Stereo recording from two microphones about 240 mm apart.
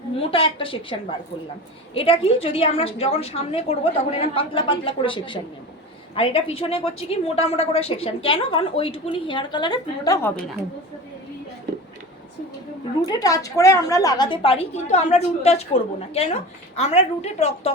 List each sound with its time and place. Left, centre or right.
0.2 s a woman's voice: left
13.1 s a woman's voice: centre